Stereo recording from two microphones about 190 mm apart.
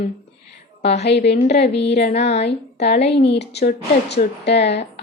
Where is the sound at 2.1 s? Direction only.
35° left (ahead or behind).